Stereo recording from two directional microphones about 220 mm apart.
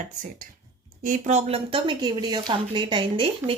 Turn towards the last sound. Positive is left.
turn(degrees=-25)  # may be behind; listen again after turning